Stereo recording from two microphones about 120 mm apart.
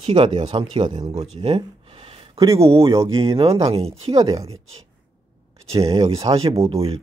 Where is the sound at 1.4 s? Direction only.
50° right (ahead or behind).